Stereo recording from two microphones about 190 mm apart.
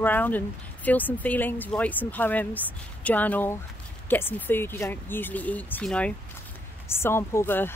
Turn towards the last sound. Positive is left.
turn(degrees=10)  # may be behind; listen again after turning